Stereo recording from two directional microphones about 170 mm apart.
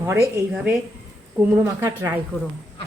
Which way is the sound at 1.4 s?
10° right (ahead or behind).